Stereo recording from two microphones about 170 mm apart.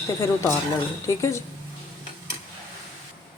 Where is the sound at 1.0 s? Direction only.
20° left (ahead or behind).